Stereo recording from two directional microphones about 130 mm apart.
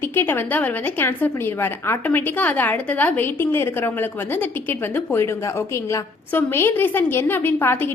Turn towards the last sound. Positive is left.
turn(degrees=15)  # may be behind; listen again after turning